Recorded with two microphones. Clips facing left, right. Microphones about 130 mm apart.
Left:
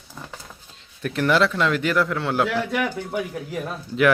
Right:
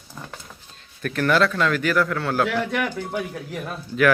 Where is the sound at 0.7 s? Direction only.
20° left (ahead or behind).